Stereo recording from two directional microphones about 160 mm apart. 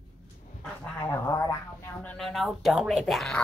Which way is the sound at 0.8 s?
15° left (ahead or behind).